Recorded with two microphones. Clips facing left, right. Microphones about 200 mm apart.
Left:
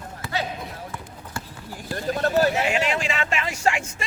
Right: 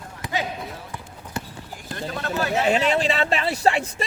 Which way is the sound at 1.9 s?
40° left (ahead or behind).